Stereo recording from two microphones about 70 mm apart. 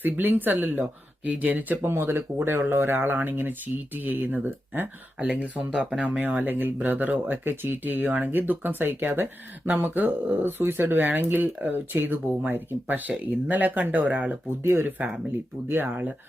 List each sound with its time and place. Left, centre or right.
0.0 s speech: right
1.9 s speech: right
5.2 s speech: centre
14.6 s speech: right